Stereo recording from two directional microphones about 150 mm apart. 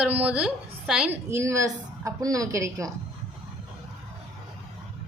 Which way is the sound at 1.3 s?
20° right (ahead or behind).